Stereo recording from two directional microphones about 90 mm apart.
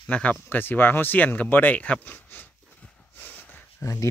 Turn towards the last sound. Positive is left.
turn(degrees=20)  # may be behind; listen again after turning